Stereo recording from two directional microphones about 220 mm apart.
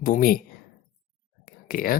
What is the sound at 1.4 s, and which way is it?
Whispering, 40° left (ahead or behind).